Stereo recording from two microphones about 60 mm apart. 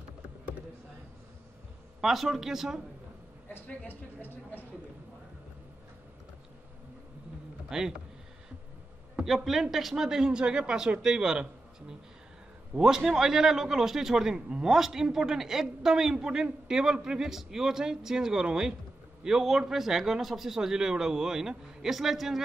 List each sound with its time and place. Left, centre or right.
2.0 s speech: centre
3.8 s speech: left
7.7 s a man's voice: centre
9.1 s a man's voice: centre
12.7 s a man's voice: centre